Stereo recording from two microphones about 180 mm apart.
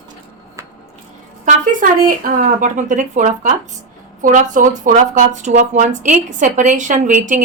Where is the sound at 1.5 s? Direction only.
45° right (ahead or behind).